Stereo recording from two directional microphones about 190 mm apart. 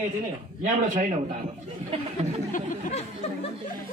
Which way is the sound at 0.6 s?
45° right (ahead or behind).